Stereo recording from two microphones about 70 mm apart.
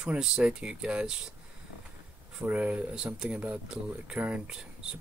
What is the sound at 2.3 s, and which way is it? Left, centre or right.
Speech, centre.